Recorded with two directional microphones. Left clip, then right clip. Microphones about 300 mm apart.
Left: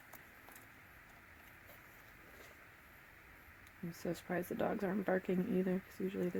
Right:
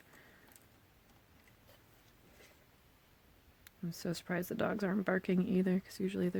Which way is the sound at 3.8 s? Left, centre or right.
Right.